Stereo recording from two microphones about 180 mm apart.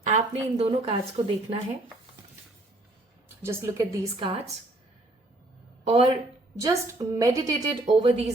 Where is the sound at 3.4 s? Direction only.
15° right (ahead or behind); by 4.5 s 30° right (ahead or behind).